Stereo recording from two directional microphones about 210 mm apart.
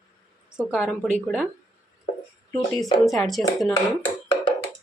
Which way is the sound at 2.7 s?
Centre (ahead or behind).